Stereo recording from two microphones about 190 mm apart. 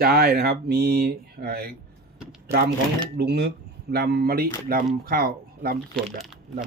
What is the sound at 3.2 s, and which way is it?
Speech, 55° right (ahead or behind).